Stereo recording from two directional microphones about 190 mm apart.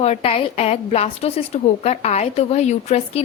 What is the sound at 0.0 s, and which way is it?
A woman's voice, 35° left (ahead or behind).